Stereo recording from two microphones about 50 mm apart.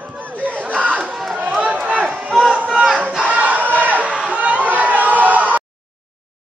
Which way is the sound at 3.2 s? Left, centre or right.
Right.